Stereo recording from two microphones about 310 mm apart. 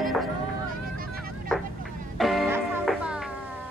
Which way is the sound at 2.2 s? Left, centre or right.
Centre.